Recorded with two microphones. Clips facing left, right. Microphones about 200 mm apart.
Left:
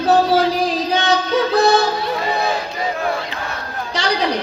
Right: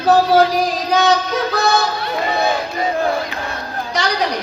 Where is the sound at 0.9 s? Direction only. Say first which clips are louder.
Right 3 dB; 30° left (ahead or behind).